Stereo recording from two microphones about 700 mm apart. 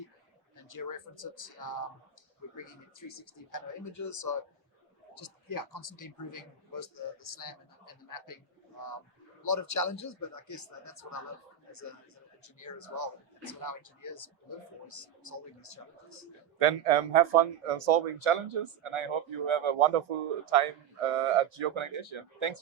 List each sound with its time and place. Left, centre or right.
0.5 s speech: left
9.4 s speech: left
16.6 s speech: right